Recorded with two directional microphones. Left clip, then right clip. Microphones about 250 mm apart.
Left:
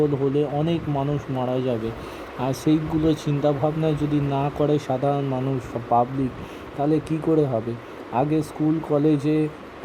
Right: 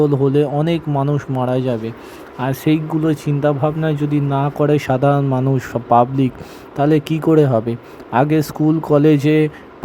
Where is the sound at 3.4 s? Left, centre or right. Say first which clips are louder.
Right 5 dB; right.